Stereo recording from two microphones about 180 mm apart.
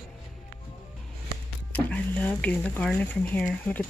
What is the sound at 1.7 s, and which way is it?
Speech, 10° left (ahead or behind).